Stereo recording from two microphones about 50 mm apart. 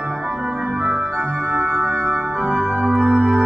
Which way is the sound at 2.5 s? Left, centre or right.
Centre.